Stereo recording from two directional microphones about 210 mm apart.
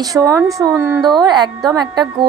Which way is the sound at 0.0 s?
15° right (ahead or behind).